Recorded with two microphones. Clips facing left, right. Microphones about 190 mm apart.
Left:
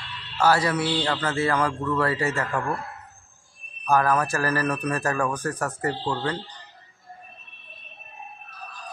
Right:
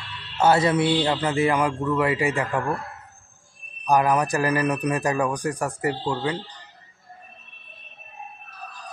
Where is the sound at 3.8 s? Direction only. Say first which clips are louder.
Right 2 dB; 15° right (ahead or behind).